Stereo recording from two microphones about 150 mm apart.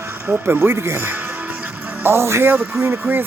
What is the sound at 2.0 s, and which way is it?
Speech, 15° right (ahead or behind).